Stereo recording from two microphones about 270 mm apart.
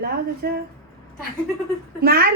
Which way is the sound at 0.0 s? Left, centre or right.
Right.